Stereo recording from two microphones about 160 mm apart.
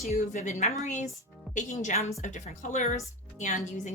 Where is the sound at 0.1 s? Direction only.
45° left (ahead or behind).